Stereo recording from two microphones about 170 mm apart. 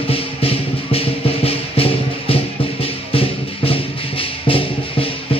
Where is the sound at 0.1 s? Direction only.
35° left (ahead or behind).